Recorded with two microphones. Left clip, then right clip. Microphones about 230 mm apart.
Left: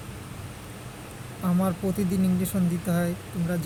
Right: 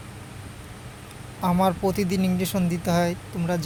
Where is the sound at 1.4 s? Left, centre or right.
Right.